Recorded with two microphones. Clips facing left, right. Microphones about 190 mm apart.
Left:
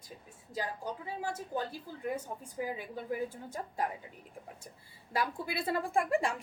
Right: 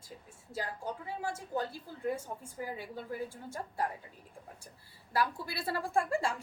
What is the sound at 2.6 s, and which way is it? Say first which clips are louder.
A woman's voice: left 3 dB; 15° left (ahead or behind).